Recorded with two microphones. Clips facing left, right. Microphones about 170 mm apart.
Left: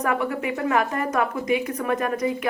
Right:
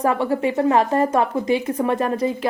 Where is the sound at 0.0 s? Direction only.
30° right (ahead or behind).